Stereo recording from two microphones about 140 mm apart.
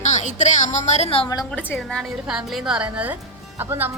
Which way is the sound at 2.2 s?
Centre (ahead or behind).